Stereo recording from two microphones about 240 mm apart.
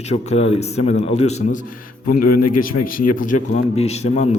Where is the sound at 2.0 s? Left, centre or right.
Left.